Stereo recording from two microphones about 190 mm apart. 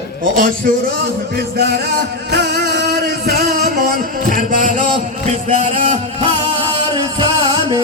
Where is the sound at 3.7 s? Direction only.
45° right (ahead or behind).